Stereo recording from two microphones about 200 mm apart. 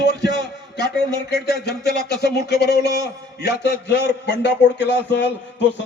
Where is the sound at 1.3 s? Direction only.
55° left (ahead or behind).